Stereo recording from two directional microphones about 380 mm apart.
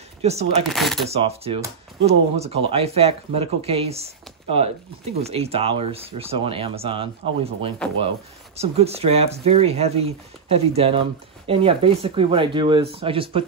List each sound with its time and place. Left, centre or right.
0.2 s speech: centre
0.7 s speech: centre
1.0 s speech: centre